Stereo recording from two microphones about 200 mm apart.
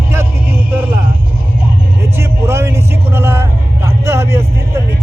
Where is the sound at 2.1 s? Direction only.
15° right (ahead or behind).